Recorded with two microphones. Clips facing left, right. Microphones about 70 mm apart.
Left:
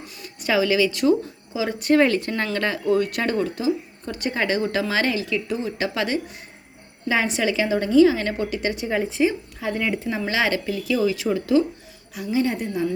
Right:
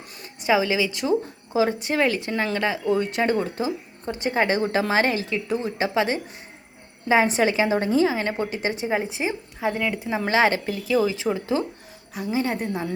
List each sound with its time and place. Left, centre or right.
0.4 s speech: centre
1.5 s speech: right
2.0 s a woman's voice: centre; by 12.9 s right